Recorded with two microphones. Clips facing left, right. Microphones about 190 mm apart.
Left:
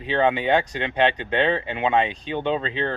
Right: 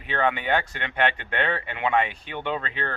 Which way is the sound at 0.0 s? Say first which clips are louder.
Left 5 dB; 20° left (ahead or behind).